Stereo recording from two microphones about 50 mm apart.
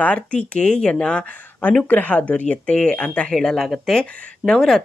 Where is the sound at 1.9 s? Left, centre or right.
Left.